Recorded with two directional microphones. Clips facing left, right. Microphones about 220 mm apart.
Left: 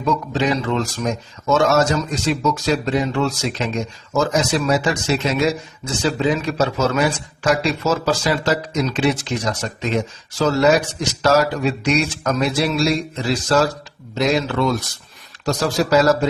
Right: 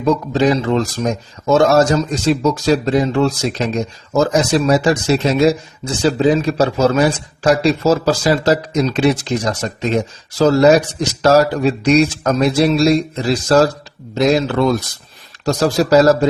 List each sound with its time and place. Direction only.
0.0 s a man's voice: 35° right (ahead or behind)
14.2 s a man's voice: 40° right (ahead or behind)